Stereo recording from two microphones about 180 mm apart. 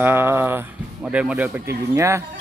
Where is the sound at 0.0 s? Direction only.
10° right (ahead or behind).